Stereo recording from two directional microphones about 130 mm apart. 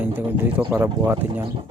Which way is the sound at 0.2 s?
15° right (ahead or behind).